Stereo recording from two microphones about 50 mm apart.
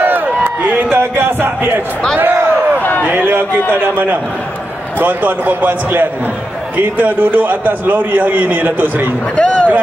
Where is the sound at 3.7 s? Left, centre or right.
Right.